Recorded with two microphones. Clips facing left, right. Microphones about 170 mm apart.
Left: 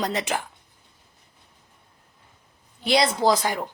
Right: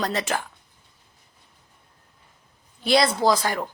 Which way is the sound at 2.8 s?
20° left (ahead or behind).